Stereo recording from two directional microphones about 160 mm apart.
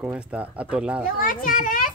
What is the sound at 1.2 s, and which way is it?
Speech, 60° left (ahead or behind).